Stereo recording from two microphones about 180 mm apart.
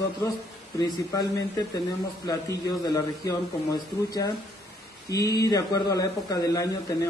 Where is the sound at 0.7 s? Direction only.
20° left (ahead or behind).